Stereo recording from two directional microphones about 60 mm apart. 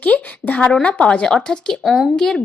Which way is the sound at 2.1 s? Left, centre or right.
Centre.